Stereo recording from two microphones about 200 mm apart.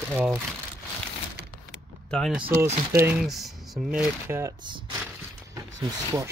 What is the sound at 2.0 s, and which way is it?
Speech, centre (ahead or behind).